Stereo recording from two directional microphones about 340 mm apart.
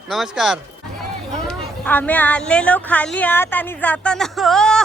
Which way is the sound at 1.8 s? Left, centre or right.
Centre.